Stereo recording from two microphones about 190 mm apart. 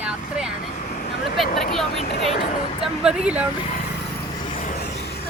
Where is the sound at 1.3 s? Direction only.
Centre (ahead or behind).